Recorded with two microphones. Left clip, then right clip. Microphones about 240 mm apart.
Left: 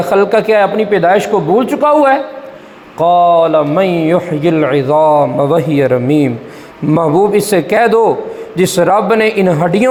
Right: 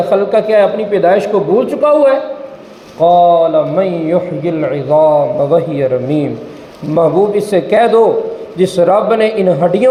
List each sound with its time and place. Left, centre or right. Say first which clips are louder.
0.0 s a man's voice: left 1 dB; left